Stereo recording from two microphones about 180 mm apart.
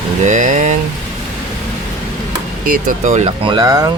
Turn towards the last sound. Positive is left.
turn(degrees=-20)  # may be behind; listen again after turning